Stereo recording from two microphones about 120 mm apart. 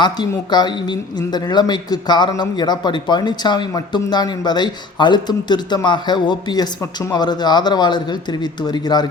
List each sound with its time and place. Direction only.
0.0 s speech: 35° left (ahead or behind)